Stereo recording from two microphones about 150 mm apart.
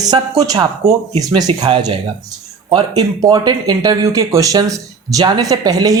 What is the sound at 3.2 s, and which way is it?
Speech, 25° right (ahead or behind).